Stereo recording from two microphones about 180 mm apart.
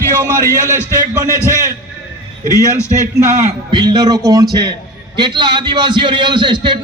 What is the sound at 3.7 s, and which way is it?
A man's voice, 25° right (ahead or behind).